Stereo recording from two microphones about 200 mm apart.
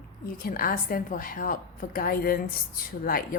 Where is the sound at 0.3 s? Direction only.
45° left (ahead or behind).